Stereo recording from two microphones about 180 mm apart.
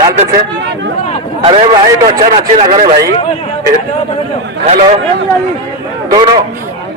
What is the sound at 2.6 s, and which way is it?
Speech, 50° right (ahead or behind).